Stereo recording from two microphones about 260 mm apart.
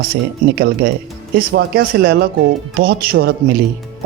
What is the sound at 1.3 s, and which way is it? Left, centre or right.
Speech, right.